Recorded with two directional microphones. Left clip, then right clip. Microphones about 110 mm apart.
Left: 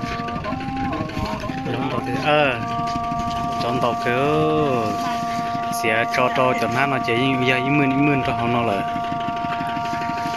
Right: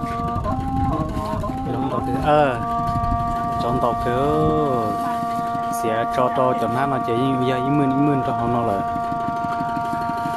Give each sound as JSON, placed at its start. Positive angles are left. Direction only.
{"t": 2.2, "sound": "speech", "side_deg": -35}
{"t": 3.8, "sound": "speech", "side_deg": -20}
{"t": 5.9, "sound": "speech", "side_deg": -20}